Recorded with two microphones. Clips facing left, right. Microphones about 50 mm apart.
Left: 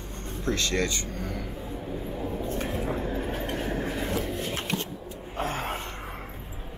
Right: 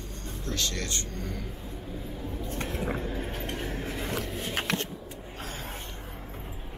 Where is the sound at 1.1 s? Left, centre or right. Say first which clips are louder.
Left 3 dB; centre.